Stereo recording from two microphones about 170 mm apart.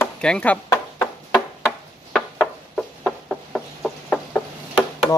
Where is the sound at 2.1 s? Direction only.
Centre (ahead or behind).